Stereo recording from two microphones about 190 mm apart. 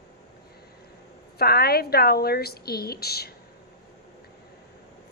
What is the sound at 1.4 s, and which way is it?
A woman's voice, 55° left (ahead or behind).